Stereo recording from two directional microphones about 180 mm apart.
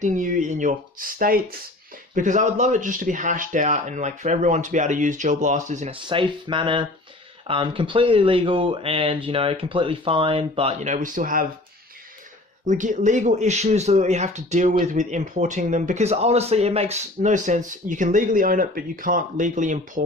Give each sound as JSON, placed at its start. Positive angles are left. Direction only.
{"t": 0.0, "sound": "speech", "side_deg": -45}
{"t": 5.9, "sound": "speech", "side_deg": -30}
{"t": 12.6, "sound": "speech", "side_deg": -45}